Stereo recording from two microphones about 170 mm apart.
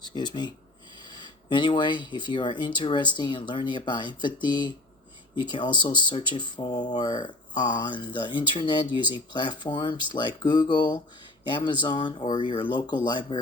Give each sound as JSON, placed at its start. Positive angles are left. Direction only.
{"t": 0.0, "sound": "speech", "side_deg": 25}